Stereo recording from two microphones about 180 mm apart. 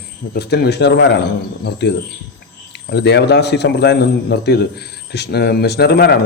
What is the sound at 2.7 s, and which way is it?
A man's voice, 70° left (ahead or behind).